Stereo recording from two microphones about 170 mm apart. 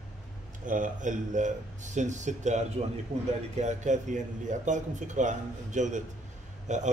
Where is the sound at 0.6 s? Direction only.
50° right (ahead or behind).